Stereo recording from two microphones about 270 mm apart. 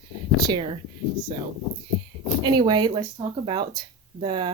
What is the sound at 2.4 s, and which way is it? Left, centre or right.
Speech, centre.